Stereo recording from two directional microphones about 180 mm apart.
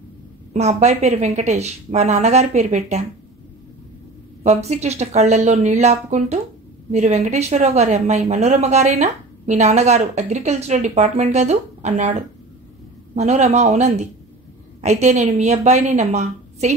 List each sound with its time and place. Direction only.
0.5 s a woman's voice: 40° right (ahead or behind)
4.4 s a woman's voice: 35° right (ahead or behind)